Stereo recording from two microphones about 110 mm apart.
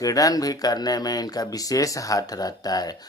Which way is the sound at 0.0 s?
35° left (ahead or behind).